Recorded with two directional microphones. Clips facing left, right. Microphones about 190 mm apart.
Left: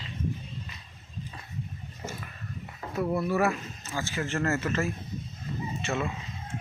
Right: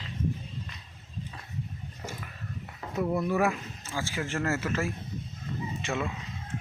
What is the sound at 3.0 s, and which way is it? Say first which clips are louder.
Speech: even; centre (ahead or behind).